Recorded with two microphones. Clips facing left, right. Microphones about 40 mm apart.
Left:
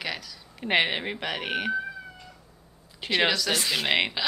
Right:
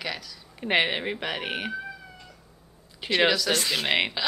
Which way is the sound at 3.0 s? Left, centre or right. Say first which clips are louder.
Right 2 dB; centre.